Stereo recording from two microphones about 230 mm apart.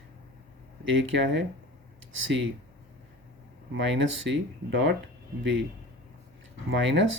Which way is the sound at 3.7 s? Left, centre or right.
Right.